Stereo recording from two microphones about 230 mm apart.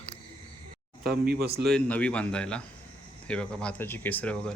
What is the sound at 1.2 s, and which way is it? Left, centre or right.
Speech, right.